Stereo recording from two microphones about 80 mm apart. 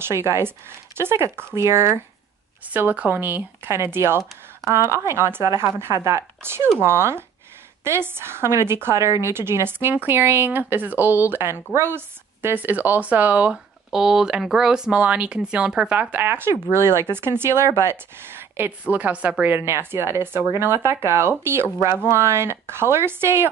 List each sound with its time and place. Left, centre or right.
0.0 s speech: right
2.7 s a woman's voice: right
13.8 s speech: centre; by 23.5 s right